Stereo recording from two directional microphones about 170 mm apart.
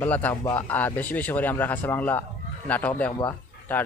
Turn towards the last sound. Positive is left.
turn(degrees=10)  # may be behind; listen again after turning